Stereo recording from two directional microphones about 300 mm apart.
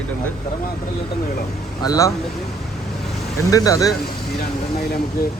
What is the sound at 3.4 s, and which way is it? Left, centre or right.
Speech, centre.